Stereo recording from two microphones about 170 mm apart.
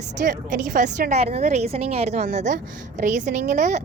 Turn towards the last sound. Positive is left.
turn(degrees=-45)  # may be behind; listen again after turning